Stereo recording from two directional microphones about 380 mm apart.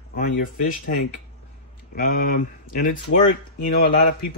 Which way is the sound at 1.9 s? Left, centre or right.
Left.